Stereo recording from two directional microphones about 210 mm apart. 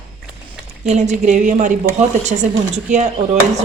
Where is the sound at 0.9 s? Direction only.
35° right (ahead or behind).